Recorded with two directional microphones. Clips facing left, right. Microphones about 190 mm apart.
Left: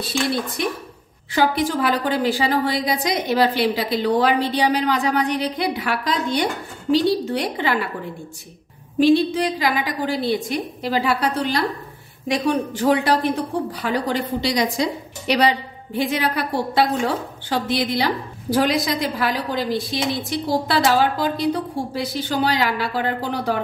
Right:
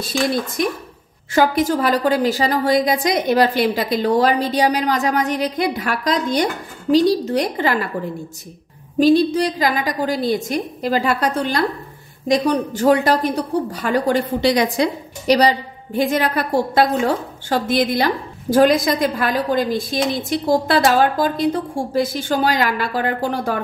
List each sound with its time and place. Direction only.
0.6 s a woman's voice: 45° right (ahead or behind)
9.0 s a woman's voice: 40° right (ahead or behind); by 14.9 s 60° right (ahead or behind)
15.2 s a woman's voice: 40° right (ahead or behind)